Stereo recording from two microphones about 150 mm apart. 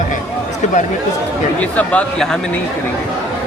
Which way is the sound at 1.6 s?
10° left (ahead or behind).